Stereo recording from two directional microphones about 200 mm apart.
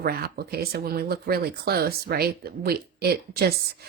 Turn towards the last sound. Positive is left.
turn(degrees=-50)  # may be behind; listen again after turning